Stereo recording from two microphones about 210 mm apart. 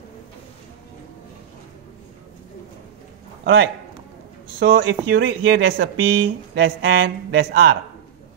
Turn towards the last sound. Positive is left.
turn(degrees=-50)  # may be behind; listen again after turning